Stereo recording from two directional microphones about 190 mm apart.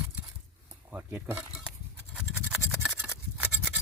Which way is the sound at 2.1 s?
5° right (ahead or behind).